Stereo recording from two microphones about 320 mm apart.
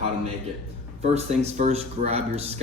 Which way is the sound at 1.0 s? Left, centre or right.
Centre.